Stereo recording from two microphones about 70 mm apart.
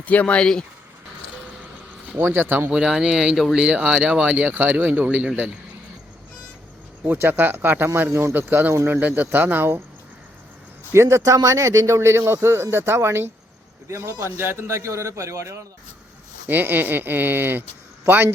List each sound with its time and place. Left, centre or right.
0.0 s speech: left
2.1 s speech: right
2.6 s speech: centre
7.0 s speech: right
9.0 s speech: right
10.9 s a man's voice: right
11.2 s a man's voice: right
13.8 s a man's voice: right
16.5 s speech: right